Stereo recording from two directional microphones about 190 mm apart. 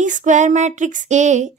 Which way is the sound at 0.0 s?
40° right (ahead or behind).